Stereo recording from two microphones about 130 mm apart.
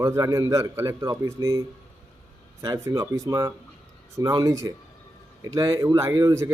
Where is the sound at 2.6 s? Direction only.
25° right (ahead or behind).